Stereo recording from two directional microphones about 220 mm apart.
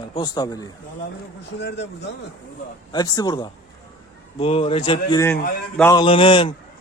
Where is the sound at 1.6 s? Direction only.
50° left (ahead or behind).